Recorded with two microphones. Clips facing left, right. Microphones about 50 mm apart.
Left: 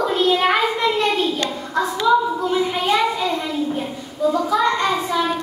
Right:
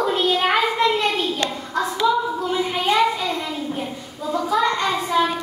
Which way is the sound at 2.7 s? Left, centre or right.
Centre.